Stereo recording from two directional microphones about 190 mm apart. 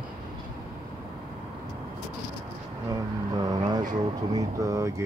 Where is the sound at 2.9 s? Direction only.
20° right (ahead or behind).